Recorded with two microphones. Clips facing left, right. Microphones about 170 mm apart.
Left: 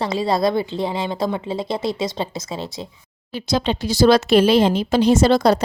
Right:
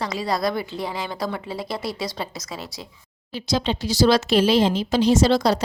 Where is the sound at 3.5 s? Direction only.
55° left (ahead or behind).